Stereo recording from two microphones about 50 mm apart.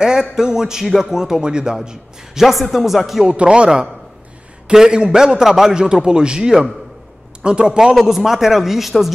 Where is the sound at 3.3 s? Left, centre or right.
Right.